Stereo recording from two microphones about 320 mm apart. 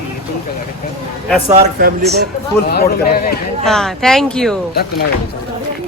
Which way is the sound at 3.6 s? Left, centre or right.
Centre.